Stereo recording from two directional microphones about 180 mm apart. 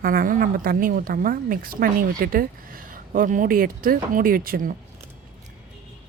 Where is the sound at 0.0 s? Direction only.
50° right (ahead or behind).